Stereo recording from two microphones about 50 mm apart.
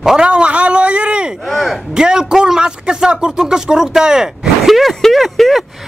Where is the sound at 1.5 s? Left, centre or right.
Centre.